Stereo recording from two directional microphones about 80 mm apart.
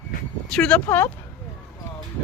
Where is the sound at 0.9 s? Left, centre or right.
Left.